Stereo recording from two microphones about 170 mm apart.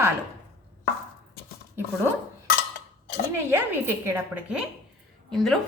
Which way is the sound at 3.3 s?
15° right (ahead or behind).